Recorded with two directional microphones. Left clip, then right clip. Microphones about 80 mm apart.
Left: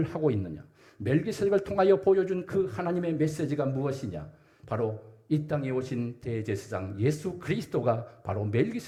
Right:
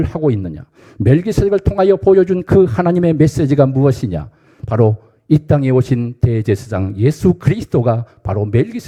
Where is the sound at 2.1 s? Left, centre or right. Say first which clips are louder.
Right 16 dB; right.